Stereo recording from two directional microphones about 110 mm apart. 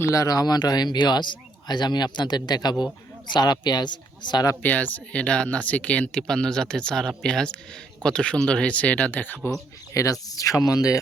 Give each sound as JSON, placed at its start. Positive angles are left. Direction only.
{"t": 0.0, "sound": "speech", "side_deg": 30}
{"t": 4.6, "sound": "speech", "side_deg": 15}
{"t": 9.9, "sound": "speech", "side_deg": 30}